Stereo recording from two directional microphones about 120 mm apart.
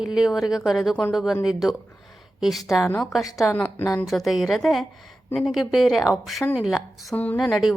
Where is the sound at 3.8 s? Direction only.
25° left (ahead or behind).